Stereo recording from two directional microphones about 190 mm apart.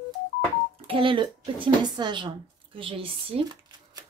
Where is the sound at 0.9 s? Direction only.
25° right (ahead or behind).